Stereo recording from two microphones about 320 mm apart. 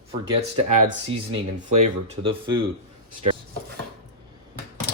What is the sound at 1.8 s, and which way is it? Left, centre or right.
Mantra, centre.